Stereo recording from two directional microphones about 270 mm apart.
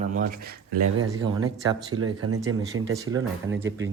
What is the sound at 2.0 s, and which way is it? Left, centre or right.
Speech, right.